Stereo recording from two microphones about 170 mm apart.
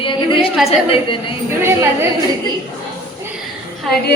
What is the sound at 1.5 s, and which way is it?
Speech, 15° right (ahead or behind).